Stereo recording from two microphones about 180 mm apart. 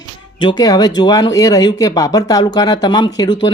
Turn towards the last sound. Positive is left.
turn(degrees=25)  # may be behind; listen again after turning